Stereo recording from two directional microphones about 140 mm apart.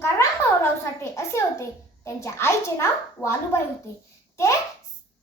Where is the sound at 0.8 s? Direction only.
20° left (ahead or behind).